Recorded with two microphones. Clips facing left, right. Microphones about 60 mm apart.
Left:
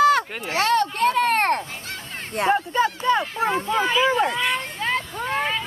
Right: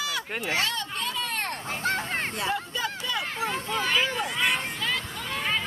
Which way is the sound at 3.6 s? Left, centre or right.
Centre.